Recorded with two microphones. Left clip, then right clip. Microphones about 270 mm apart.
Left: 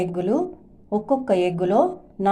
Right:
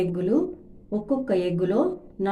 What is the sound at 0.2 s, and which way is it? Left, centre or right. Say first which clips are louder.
Speech: left 1 dB; left.